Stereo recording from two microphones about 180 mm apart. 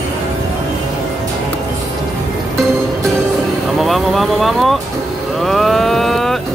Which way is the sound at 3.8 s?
Centre (ahead or behind).